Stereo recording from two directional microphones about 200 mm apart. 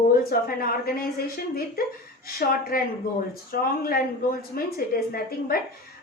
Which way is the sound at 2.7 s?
45° left (ahead or behind).